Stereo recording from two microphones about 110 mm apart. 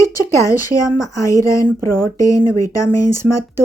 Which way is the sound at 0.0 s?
30° left (ahead or behind).